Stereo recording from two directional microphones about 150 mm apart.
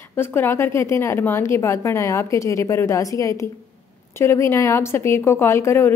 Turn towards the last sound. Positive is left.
turn(degrees=15)  # may be behind; listen again after turning